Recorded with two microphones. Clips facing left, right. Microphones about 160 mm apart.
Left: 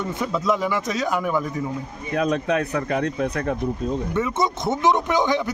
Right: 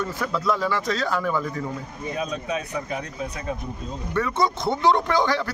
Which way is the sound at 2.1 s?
65° left (ahead or behind).